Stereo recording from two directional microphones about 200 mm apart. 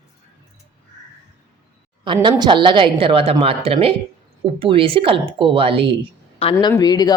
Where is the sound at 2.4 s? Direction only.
25° right (ahead or behind).